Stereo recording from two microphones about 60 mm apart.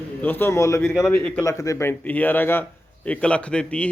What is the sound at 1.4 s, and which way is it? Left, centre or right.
Speech, left.